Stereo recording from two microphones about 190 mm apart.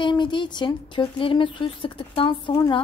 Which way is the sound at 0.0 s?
25° left (ahead or behind).